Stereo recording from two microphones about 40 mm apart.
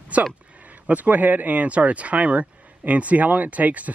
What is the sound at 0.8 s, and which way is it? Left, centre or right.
Speech, right.